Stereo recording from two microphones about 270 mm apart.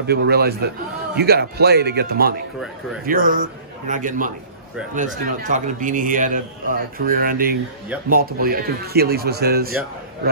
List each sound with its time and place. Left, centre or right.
0.0 s a man's voice: right